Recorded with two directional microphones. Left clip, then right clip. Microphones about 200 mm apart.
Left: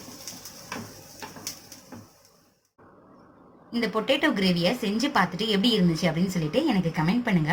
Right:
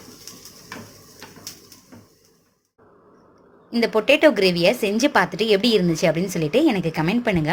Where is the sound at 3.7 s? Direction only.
45° right (ahead or behind).